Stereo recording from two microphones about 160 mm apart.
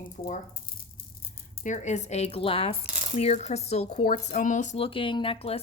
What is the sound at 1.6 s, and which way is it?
Speech, 50° left (ahead or behind).